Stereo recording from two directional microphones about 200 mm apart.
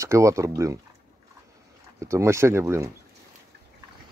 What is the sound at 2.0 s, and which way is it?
Speech, 15° right (ahead or behind).